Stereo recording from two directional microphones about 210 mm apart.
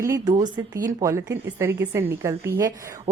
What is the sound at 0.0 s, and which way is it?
A woman's voice, 15° right (ahead or behind).